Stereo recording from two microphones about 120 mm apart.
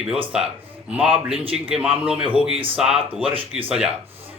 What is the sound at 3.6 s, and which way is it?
Speech, 10° right (ahead or behind).